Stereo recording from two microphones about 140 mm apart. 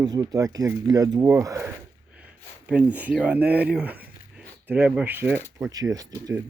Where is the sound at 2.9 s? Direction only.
10° right (ahead or behind).